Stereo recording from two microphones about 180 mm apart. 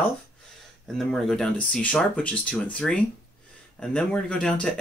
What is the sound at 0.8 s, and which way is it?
Speech, centre (ahead or behind).